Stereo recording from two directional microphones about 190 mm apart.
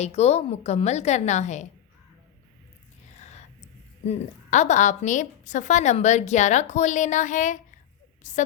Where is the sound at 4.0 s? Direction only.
35° left (ahead or behind).